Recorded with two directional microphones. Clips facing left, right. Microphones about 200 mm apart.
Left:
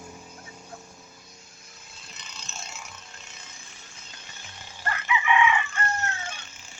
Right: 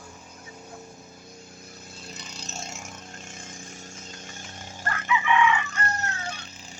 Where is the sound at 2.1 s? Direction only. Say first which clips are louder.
Right 4 dB; 40° right (ahead or behind).